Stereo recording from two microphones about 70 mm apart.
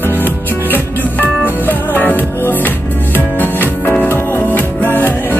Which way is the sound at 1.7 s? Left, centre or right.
Left.